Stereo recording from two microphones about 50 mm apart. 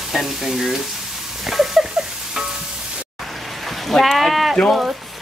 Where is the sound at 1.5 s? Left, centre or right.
Centre.